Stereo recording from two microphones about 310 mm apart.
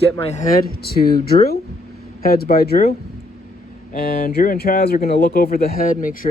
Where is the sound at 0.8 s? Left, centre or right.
Left.